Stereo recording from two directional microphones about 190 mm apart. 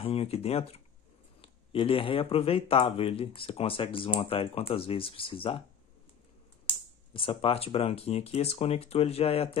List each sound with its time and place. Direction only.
0.0 s speech: 30° left (ahead or behind)
7.2 s speech: 30° left (ahead or behind)